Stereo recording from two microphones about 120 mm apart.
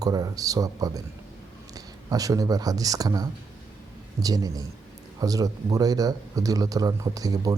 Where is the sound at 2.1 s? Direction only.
30° right (ahead or behind).